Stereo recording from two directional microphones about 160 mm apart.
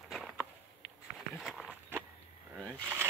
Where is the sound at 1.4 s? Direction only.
Centre (ahead or behind).